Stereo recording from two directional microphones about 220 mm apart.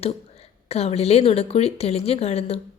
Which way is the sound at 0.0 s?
25° left (ahead or behind).